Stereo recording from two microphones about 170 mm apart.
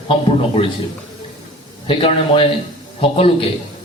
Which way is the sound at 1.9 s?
30° left (ahead or behind).